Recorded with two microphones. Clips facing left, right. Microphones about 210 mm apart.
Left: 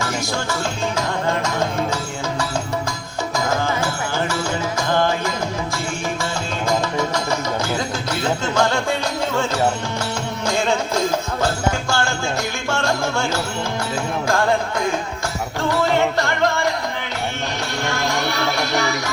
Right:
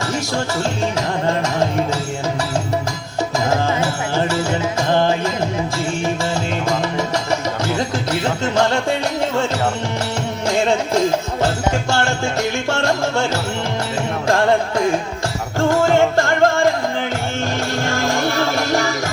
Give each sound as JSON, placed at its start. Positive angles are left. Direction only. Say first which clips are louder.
{"t": 3.3, "sound": "music", "louder": "right 3 dB", "side_deg": -25}
{"t": 4.9, "sound": "music", "louder": "right 3 dB", "side_deg": -25}
{"t": 11.9, "sound": "music", "louder": "right 3 dB", "side_deg": -25}
{"t": 15.7, "sound": "music", "louder": "right 4 dB", "side_deg": -45}
{"t": 17.8, "sound": "music", "louder": "right 2 dB", "side_deg": -45}